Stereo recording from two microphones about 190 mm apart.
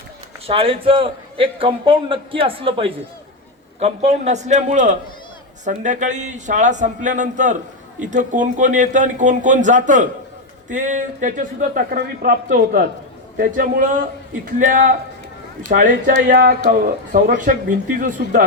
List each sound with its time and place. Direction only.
0.4 s a man's voice: 30° right (ahead or behind); by 18.4 s 50° right (ahead or behind)